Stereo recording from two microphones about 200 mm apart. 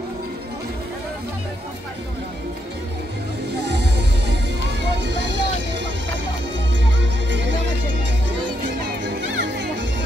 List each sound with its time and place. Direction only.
3.6 s music: 60° right (ahead or behind)
7.0 s music: 65° right (ahead or behind)
9.0 s music: 60° right (ahead or behind)